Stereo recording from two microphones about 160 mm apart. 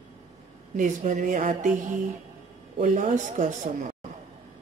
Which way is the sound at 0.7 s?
50° right (ahead or behind).